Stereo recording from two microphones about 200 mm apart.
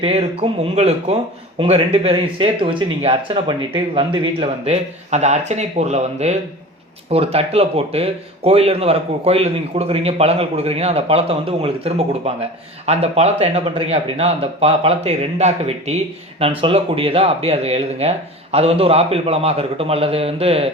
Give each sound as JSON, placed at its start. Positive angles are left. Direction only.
{"t": 0.0, "sound": "speech", "side_deg": -30}